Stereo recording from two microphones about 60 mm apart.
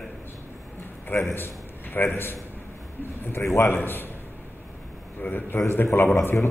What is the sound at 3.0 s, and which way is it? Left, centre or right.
A man's voice, left.